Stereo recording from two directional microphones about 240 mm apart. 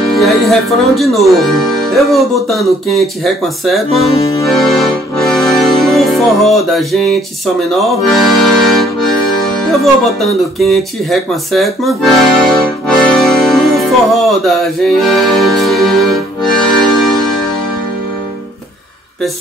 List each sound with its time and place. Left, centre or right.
0.2 s speech: centre
4.0 s accordion: left
4.5 s accordion: centre
10.6 s speech: centre
14.4 s music: centre